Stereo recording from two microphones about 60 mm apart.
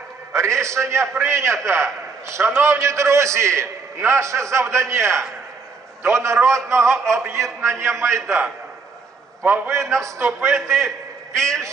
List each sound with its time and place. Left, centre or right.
0.3 s a man's voice: right
10.5 s a man's voice: centre